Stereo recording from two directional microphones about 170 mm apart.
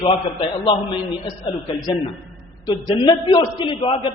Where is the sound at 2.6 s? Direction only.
25° left (ahead or behind).